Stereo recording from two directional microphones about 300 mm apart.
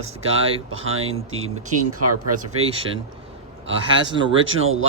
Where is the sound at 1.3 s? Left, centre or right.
Right.